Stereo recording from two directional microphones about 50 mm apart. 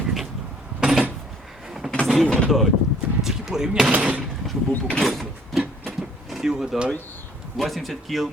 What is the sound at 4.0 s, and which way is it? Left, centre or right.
Speech, right.